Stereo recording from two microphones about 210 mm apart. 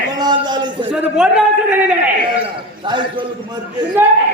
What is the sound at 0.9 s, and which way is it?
Speech, 5° right (ahead or behind).